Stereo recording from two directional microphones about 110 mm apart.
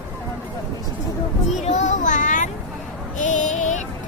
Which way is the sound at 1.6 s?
90° left.